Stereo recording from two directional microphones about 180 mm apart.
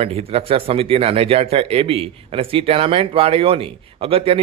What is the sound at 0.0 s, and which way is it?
A man's voice, 35° right (ahead or behind).